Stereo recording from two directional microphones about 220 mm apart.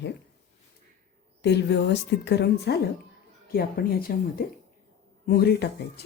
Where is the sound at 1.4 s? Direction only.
50° left (ahead or behind).